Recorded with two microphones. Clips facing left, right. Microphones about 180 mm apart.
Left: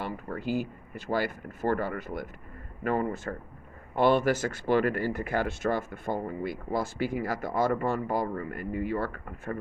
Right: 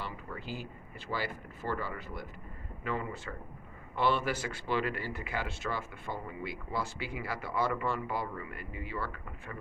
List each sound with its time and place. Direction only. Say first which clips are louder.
0.0 s speech: left 8 dB; 45° left (ahead or behind)